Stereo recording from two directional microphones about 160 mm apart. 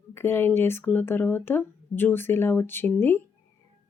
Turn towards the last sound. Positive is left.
turn(degrees=15)  # may be behind; listen again after turning